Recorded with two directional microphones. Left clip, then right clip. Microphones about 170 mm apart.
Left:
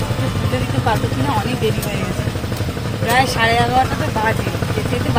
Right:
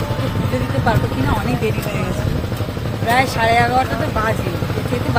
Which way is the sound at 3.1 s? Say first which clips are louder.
Even; 10° right (ahead or behind).